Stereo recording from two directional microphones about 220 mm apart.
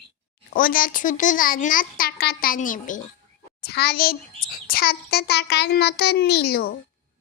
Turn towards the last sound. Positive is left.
turn(degrees=45)  # may be behind; listen again after turning